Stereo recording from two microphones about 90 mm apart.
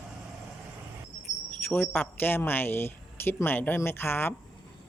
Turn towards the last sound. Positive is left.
turn(degrees=25)  # may be behind; listen again after turning